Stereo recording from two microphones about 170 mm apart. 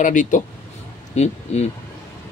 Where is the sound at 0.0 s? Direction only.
50° left (ahead or behind).